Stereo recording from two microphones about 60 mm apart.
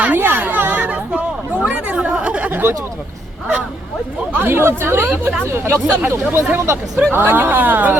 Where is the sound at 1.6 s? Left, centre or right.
Right.